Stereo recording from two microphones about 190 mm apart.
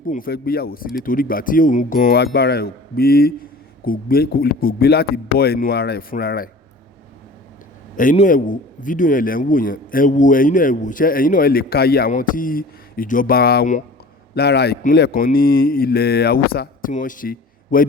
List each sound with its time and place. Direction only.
0.1 s a man's voice: 50° left (ahead or behind)
8.1 s a man's voice: 40° left (ahead or behind)
14.3 s a man's voice: 60° left (ahead or behind)